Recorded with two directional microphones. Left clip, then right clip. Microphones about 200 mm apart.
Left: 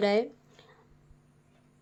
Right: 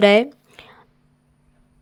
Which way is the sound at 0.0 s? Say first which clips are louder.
Right 13 dB; 40° right (ahead or behind).